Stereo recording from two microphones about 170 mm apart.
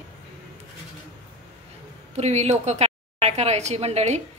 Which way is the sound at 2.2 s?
40° right (ahead or behind).